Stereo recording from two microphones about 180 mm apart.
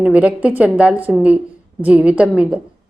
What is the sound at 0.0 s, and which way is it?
A woman's voice, 5° right (ahead or behind).